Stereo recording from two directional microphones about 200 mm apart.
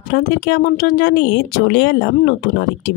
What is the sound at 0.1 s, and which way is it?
Speech, 50° left (ahead or behind).